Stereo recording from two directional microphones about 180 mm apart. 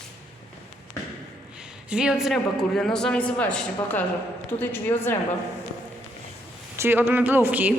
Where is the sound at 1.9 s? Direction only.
5° right (ahead or behind); by 5.1 s 10° left (ahead or behind).